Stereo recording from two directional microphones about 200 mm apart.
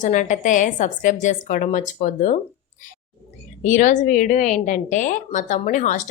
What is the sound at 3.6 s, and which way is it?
A woman's voice, 40° left (ahead or behind).